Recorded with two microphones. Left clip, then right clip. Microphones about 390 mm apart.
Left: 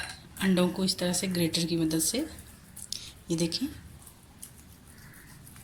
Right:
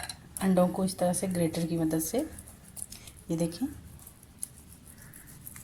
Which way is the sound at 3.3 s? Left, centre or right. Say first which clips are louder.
Left 2 dB; centre.